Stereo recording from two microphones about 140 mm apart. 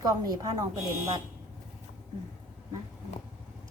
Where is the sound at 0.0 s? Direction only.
25° right (ahead or behind).